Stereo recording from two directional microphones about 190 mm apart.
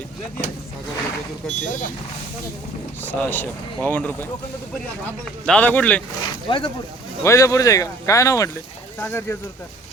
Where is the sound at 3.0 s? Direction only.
10° left (ahead or behind).